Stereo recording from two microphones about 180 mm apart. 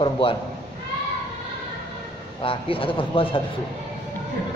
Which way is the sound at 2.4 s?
30° left (ahead or behind).